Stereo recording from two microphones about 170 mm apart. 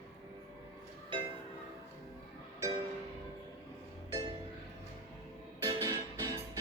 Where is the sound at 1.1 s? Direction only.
30° right (ahead or behind).